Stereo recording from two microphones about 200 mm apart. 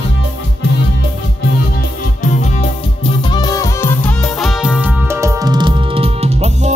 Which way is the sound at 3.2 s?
20° left (ahead or behind).